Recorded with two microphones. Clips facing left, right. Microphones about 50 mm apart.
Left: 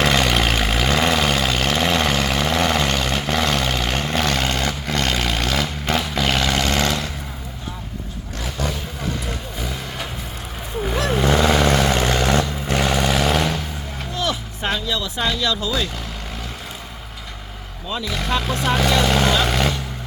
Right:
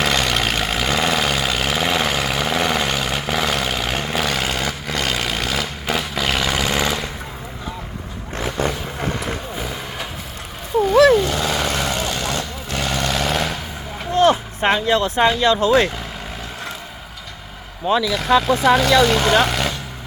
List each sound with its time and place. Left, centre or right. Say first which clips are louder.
0.0 s vehicle: left 1 dB; centre
8.4 s vehicle: right 4 dB; right
9.6 s vehicle: right 1 dB; centre
11.1 s vehicle: even; left
12.9 s vehicle: even; centre
13.2 s vehicle: left 2 dB; centre
14.1 s a sound: right 10 dB; right
15.2 s speech: right 5 dB; right
17.9 s speech: right 10 dB; right
18.2 s speech: right 4 dB; centre
19.5 s vehicle: left 1 dB; centre